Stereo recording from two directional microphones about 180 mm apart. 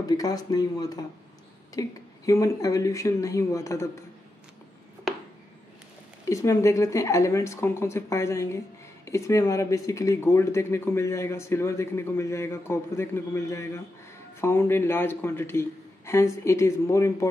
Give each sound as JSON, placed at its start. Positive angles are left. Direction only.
{"t": 0.0, "sound": "speech", "side_deg": 20}
{"t": 6.2, "sound": "speech", "side_deg": 15}